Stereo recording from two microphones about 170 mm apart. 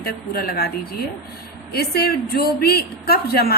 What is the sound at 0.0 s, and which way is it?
Speech, 65° left (ahead or behind).